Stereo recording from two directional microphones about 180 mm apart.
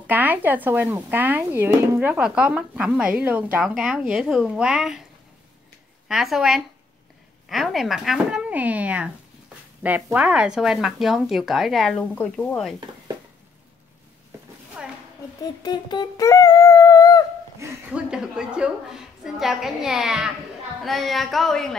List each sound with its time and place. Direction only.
0.0 s speech: 10° right (ahead or behind)
6.0 s speech: centre (ahead or behind)
14.8 s a sound: 5° right (ahead or behind)
15.6 s a sound: 25° left (ahead or behind)
17.6 s speech: 15° right (ahead or behind)
18.1 s speech: 5° right (ahead or behind)